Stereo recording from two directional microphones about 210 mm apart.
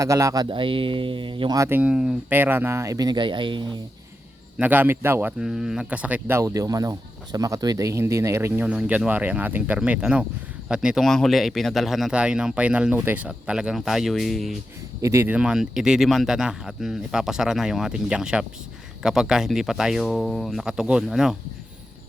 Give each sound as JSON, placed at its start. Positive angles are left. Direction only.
{"t": 0.0, "sound": "speech", "side_deg": -15}
{"t": 4.5, "sound": "speech", "side_deg": -10}
{"t": 15.0, "sound": "speech", "side_deg": -10}